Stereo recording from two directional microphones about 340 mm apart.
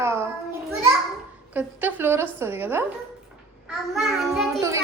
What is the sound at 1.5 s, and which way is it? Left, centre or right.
A woman's voice, centre.